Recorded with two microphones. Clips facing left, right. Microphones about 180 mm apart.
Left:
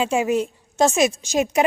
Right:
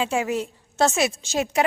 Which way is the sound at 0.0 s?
20° left (ahead or behind).